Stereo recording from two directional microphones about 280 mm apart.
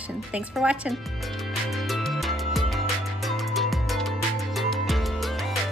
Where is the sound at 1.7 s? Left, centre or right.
Centre.